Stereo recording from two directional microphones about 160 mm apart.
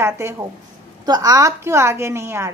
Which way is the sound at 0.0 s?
15° right (ahead or behind).